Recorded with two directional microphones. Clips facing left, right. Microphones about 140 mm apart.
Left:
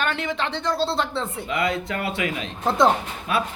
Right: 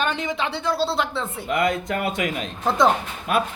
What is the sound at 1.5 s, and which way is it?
Speech, 50° right (ahead or behind).